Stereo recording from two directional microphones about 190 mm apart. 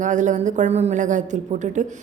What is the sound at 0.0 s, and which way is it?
Speech, 40° right (ahead or behind).